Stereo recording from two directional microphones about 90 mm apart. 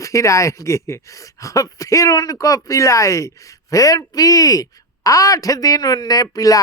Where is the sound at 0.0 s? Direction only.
35° left (ahead or behind).